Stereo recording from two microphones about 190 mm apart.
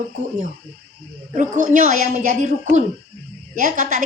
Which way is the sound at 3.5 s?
45° right (ahead or behind).